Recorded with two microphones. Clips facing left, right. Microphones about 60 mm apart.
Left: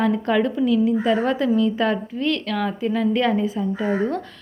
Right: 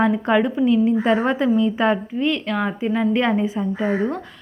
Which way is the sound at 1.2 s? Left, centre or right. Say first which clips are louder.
Right 1 dB; right.